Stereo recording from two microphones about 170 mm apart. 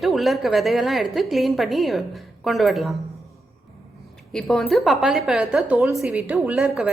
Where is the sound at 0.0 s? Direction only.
Centre (ahead or behind).